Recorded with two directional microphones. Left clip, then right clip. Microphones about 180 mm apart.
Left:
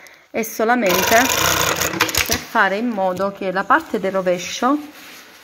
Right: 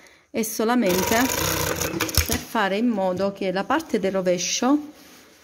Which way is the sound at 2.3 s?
50° right (ahead or behind).